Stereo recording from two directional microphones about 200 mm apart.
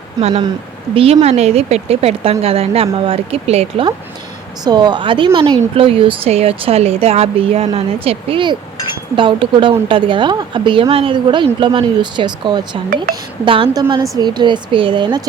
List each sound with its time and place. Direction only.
0.2 s speech: 30° right (ahead or behind)